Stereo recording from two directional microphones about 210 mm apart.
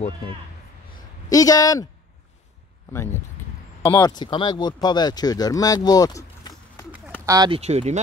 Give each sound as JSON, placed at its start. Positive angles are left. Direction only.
{"t": 1.3, "sound": "speech", "side_deg": 15}
{"t": 3.8, "sound": "speech", "side_deg": 15}
{"t": 7.2, "sound": "speech", "side_deg": -20}